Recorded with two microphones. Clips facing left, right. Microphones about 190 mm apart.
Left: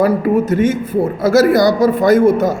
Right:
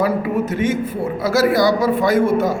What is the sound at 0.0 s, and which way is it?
A man's voice, 45° left (ahead or behind).